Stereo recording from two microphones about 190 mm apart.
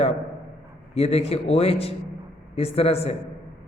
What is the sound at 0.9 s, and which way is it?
A man's voice, 30° left (ahead or behind).